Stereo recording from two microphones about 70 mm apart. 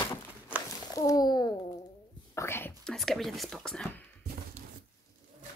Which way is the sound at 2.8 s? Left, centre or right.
Centre.